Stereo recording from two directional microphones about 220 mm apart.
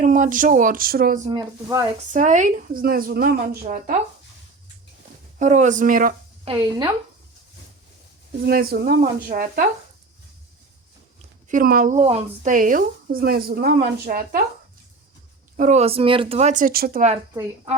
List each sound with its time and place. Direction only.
0.0 s a woman's voice: 35° right (ahead or behind)
1.6 s speech: 15° right (ahead or behind)
2.1 s a woman's voice: 35° right (ahead or behind)
5.4 s a woman's voice: 35° right (ahead or behind)
6.4 s speech: 20° right (ahead or behind)
8.4 s a woman's voice: 40° right (ahead or behind)
11.4 s a woman's voice: 40° right (ahead or behind)
15.5 s a woman's voice: 30° right (ahead or behind)